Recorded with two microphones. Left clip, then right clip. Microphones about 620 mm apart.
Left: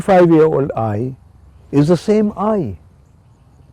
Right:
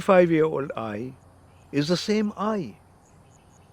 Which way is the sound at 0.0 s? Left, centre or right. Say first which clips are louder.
Left 8 dB; left.